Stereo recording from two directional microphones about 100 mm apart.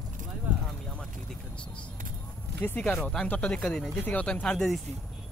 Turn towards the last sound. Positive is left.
turn(degrees=10)  # may be behind; listen again after turning